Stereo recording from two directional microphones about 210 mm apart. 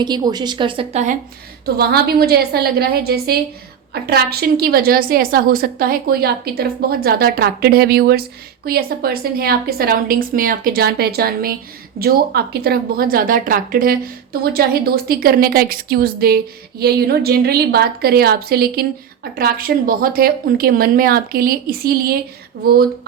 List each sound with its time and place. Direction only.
0.0 s speech: 20° right (ahead or behind)
1.6 s a woman's voice: 50° right (ahead or behind)